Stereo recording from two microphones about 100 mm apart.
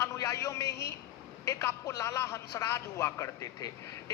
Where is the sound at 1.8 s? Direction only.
30° left (ahead or behind).